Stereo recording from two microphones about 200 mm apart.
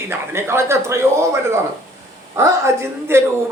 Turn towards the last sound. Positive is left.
turn(degrees=-10)  # may be behind; listen again after turning